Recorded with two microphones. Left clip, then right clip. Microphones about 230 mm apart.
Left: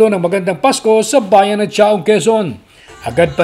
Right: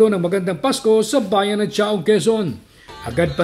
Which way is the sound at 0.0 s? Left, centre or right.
Left.